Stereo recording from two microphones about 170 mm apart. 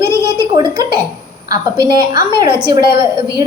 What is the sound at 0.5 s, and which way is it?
A woman's voice, 25° right (ahead or behind).